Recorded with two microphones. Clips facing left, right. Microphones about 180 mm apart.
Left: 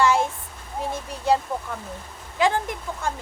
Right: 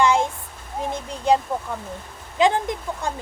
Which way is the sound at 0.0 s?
20° right (ahead or behind).